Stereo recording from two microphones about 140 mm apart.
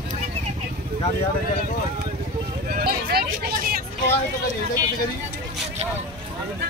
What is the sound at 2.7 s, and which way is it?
Hubbub, 90° right.